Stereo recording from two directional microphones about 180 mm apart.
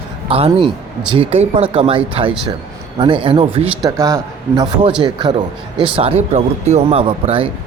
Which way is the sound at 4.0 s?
15° right (ahead or behind).